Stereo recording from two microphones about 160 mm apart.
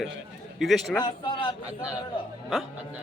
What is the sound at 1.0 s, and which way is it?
Speech, 30° left (ahead or behind).